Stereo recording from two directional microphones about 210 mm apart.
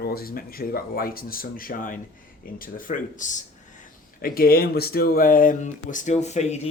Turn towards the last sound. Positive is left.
turn(degrees=30)  # may be behind; listen again after turning